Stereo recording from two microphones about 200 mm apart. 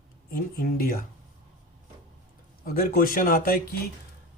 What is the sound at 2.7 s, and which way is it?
Speech, 45° left (ahead or behind).